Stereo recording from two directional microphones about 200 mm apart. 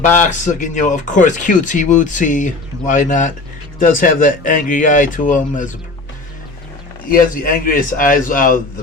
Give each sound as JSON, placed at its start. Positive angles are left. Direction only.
{"t": 0.0, "sound": "speech", "side_deg": 40}
{"t": 7.1, "sound": "a man's voice", "side_deg": 45}